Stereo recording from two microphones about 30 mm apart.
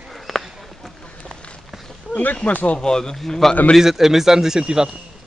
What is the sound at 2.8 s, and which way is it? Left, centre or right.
Speech, left.